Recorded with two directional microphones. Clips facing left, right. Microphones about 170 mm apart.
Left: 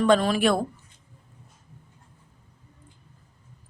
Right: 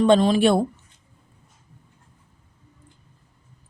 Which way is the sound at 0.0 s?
25° right (ahead or behind).